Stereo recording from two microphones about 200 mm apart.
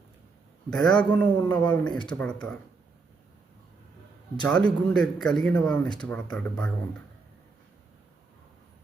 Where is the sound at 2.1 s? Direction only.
5° left (ahead or behind).